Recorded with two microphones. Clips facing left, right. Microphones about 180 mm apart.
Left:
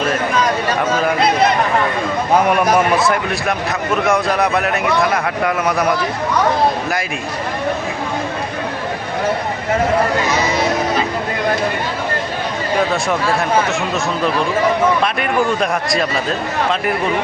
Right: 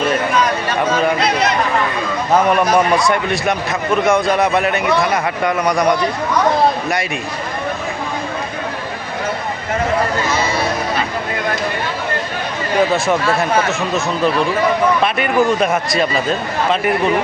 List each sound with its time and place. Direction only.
2.3 s a man's voice: 10° left (ahead or behind)
10.4 s music: 20° left (ahead or behind)
12.9 s a man's voice: centre (ahead or behind)